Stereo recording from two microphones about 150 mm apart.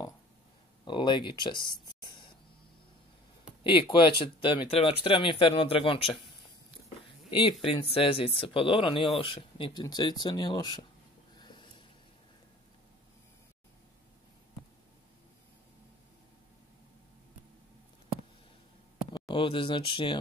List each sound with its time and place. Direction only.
0.8 s speech: 30° left (ahead or behind)
2.0 s a sound: 30° left (ahead or behind)
3.6 s speech: 35° left (ahead or behind)
7.2 s speech: 35° left (ahead or behind)
11.3 s a sound: 30° left (ahead or behind)
19.1 s speech: 35° left (ahead or behind)